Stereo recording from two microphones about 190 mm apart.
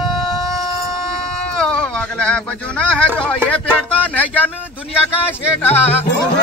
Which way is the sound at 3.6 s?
5° left (ahead or behind).